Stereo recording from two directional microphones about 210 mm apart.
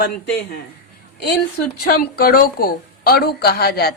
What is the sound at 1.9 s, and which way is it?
A woman's voice, 45° left (ahead or behind).